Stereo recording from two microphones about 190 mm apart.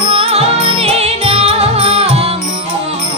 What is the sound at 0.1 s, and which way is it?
Music, 30° right (ahead or behind).